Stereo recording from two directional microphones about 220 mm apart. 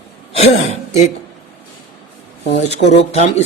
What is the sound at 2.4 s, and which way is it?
Speech, 30° left (ahead or behind).